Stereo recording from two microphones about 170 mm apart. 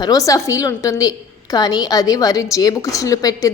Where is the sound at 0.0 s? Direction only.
20° left (ahead or behind).